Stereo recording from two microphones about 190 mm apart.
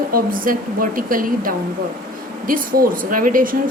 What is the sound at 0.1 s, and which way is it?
Speech, 45° right (ahead or behind).